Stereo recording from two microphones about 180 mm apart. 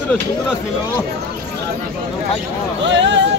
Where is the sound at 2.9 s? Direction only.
85° right.